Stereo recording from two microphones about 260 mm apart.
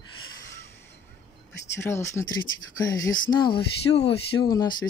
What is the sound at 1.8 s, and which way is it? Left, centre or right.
Speech, centre.